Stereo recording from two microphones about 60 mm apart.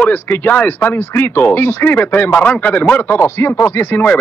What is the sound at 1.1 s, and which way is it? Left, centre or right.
Speech, left.